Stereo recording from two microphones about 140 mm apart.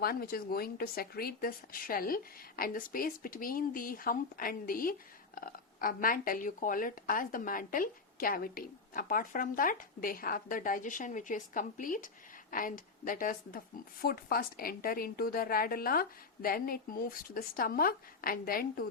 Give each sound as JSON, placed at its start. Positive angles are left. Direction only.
{"t": 0.0, "sound": "speech", "side_deg": 90}
{"t": 14.0, "sound": "a woman's voice", "side_deg": 90}